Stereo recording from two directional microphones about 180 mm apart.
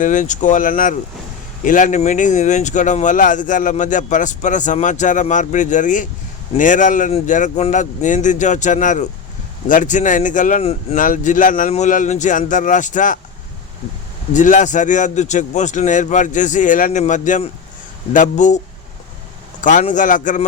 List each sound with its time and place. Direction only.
0.0 s speech: 45° left (ahead or behind)
14.3 s speech: 45° left (ahead or behind)
19.6 s speech: 45° left (ahead or behind)